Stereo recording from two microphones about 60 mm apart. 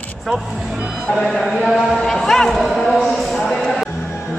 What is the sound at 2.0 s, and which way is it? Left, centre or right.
A man's voice, centre.